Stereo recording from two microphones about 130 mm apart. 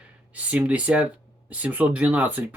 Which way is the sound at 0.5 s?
10° right (ahead or behind).